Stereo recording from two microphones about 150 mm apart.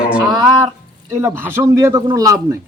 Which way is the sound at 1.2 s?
15° right (ahead or behind).